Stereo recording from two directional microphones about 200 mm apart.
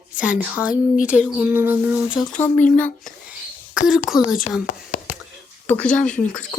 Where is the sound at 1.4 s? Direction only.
10° right (ahead or behind).